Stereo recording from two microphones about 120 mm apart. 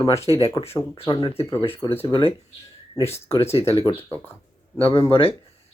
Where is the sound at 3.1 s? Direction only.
25° left (ahead or behind).